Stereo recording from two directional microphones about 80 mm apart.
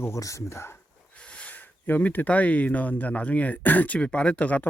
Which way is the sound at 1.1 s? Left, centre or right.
Centre.